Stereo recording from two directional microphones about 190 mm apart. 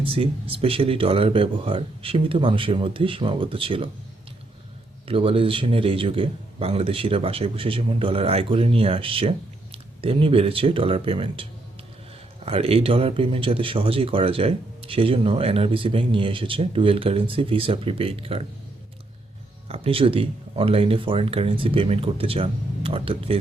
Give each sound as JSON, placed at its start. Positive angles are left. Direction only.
{"t": 0.0, "sound": "speech", "side_deg": -30}
{"t": 5.0, "sound": "speech", "side_deg": -30}
{"t": 12.5, "sound": "speech", "side_deg": -30}
{"t": 19.6, "sound": "speech", "side_deg": -30}